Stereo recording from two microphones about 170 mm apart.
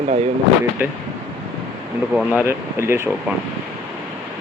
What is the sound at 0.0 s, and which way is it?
Speech, 40° right (ahead or behind).